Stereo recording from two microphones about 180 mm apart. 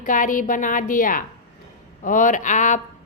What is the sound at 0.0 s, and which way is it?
Speech, 45° left (ahead or behind).